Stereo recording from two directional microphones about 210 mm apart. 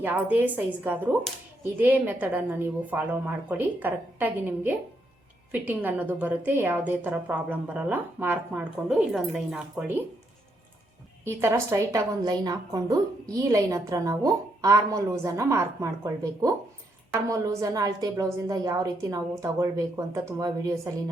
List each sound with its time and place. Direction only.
0.0 s a woman's voice: 10° right (ahead or behind)
11.3 s a woman's voice: 10° right (ahead or behind)